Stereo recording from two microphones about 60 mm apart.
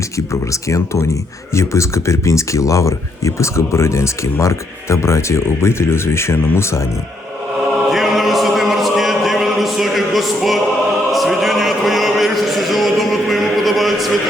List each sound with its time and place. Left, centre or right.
0.5 s speech: left
7.9 s music: centre
11.1 s a sound: centre